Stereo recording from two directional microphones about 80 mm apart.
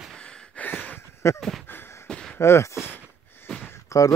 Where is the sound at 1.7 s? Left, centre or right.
Left.